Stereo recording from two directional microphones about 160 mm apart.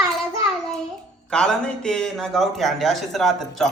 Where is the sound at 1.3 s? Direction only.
5° left (ahead or behind).